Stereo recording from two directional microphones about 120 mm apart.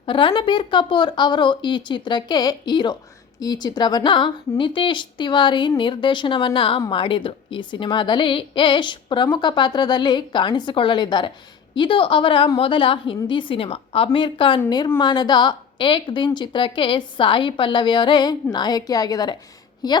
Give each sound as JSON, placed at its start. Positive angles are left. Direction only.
{"t": 0.0, "sound": "a woman's voice", "side_deg": 45}